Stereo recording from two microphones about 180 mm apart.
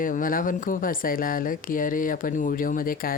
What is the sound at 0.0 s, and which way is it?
Speech, 50° left (ahead or behind).